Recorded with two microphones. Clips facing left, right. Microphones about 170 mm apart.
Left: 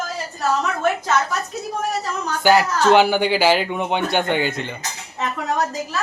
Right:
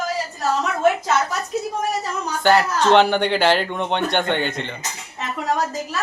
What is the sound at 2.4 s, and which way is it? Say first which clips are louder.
A man's voice: left 1 dB; 5° left (ahead or behind).